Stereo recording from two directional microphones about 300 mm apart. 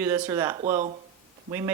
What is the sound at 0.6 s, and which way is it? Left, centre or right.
Speech, right.